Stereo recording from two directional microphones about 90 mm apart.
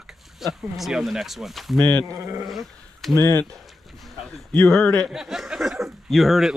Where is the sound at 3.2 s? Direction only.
30° left (ahead or behind).